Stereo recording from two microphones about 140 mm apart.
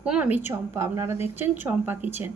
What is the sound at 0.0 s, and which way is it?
A woman's voice, 10° right (ahead or behind).